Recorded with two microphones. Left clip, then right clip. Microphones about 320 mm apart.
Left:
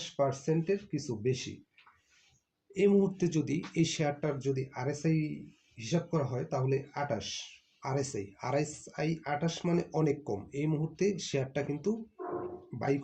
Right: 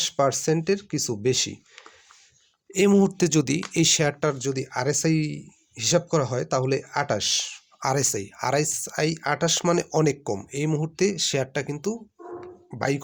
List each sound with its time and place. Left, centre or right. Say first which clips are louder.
0.0 s speech: right 9 dB; right
2.7 s speech: right 7 dB; right